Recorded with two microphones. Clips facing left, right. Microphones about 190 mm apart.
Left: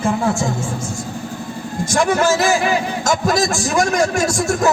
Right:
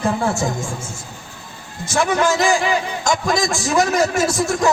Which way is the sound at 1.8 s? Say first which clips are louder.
Left 2 dB; 15° left (ahead or behind).